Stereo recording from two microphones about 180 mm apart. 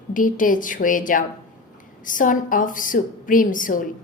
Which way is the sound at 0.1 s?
45° left (ahead or behind).